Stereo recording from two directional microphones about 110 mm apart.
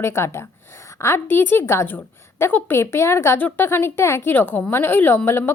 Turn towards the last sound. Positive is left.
turn(degrees=20)  # may be behind; listen again after turning